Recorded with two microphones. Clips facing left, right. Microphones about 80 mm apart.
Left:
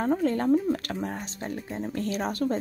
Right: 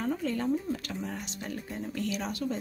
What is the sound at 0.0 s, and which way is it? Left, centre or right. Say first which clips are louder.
Speech: left 6 dB; left.